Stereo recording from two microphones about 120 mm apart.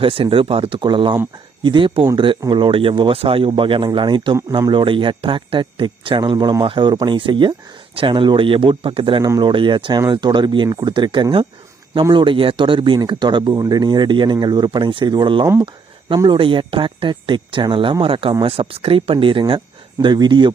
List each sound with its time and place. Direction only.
0.0 s speech: 50° right (ahead or behind)